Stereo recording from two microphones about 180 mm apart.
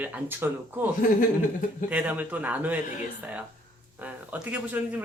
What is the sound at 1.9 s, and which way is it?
Speech, 10° right (ahead or behind).